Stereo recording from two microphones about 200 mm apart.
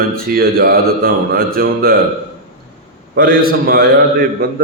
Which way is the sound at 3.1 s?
50° right (ahead or behind).